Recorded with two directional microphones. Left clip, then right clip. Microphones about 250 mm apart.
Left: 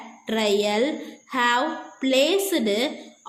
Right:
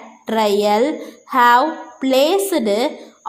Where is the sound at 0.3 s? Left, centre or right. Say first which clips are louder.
Right 7 dB; centre.